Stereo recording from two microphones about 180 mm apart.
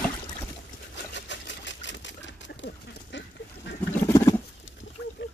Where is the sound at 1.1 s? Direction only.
80° left.